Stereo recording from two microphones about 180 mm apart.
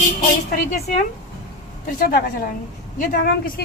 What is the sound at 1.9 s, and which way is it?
Speech, 50° left (ahead or behind).